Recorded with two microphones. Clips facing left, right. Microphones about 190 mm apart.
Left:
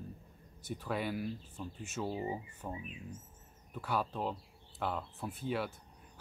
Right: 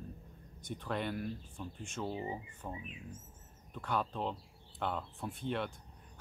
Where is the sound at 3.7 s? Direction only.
5° left (ahead or behind).